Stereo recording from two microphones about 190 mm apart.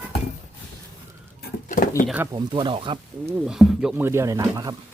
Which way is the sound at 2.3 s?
25° right (ahead or behind).